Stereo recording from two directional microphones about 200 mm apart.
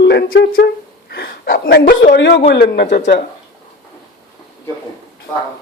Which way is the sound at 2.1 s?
60° left (ahead or behind).